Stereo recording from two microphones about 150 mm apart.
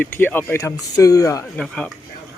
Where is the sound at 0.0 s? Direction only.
10° left (ahead or behind).